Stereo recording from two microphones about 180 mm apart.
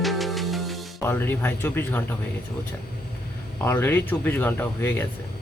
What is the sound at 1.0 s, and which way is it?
Speech, 10° left (ahead or behind).